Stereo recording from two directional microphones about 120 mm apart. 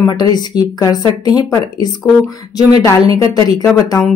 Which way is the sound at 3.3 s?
30° left (ahead or behind).